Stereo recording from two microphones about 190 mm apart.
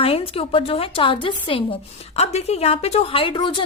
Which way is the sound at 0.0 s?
30° left (ahead or behind).